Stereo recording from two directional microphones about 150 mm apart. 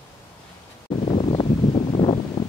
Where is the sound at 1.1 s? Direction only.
35° left (ahead or behind).